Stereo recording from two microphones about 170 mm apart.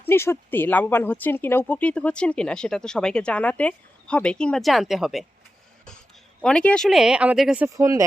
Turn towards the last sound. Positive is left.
turn(degrees=-20)  # may be behind; listen again after turning